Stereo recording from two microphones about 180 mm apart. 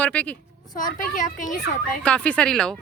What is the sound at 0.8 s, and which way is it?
Speech, 45° left (ahead or behind).